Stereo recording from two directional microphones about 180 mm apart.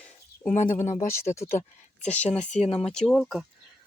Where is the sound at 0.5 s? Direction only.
40° left (ahead or behind).